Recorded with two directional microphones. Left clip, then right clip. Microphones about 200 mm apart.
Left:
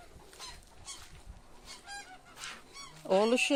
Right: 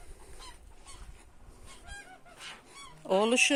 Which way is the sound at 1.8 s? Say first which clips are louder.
Left 1 dB; 50° left (ahead or behind).